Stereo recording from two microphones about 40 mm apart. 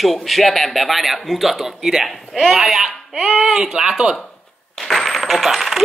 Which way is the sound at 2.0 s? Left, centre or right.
Centre.